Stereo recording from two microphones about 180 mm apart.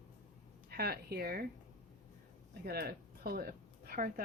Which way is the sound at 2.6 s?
60° right (ahead or behind).